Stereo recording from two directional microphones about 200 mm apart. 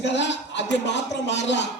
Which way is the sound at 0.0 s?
60° left (ahead or behind).